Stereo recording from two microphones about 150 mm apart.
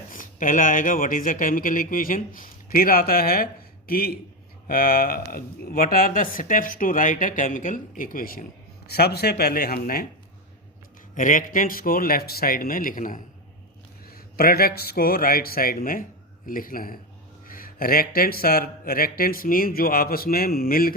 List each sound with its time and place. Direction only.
0.1 s speech: 60° left (ahead or behind)
8.9 s speech: 90° left; by 10.1 s 75° left (ahead or behind)
11.1 s speech: 60° left (ahead or behind)
14.0 s speech: 85° left